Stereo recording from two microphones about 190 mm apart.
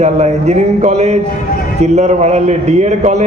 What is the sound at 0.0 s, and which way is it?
A man's voice, 35° right (ahead or behind).